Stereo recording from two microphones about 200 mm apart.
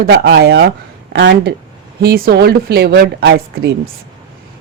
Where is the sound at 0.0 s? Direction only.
55° right (ahead or behind).